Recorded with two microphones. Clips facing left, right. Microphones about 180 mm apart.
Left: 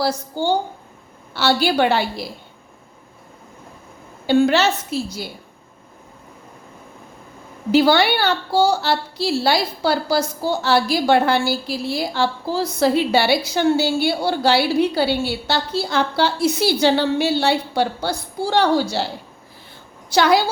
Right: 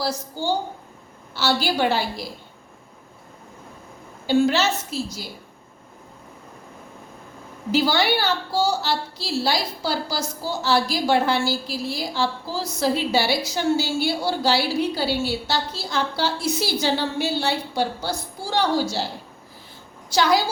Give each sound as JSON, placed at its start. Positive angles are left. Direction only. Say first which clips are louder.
{"t": 0.0, "sound": "a woman's voice", "louder": "left 5 dB", "side_deg": 60}
{"t": 4.3, "sound": "a woman's voice", "louder": "left 3 dB", "side_deg": 60}
{"t": 7.7, "sound": "a woman's voice", "louder": "left 5 dB", "side_deg": 65}
{"t": 20.1, "sound": "a woman's voice", "louder": "left 4 dB", "side_deg": 65}